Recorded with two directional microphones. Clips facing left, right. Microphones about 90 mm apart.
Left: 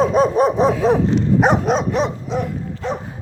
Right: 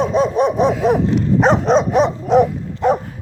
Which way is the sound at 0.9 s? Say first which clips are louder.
Right 1 dB; 30° left (ahead or behind).